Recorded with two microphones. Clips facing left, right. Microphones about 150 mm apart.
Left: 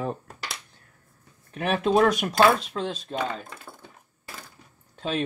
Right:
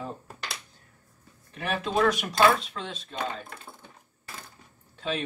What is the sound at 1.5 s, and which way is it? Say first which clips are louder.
Speech: left 6 dB; 55° left (ahead or behind).